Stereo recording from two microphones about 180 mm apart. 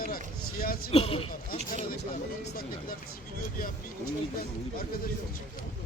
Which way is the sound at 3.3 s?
55° left (ahead or behind).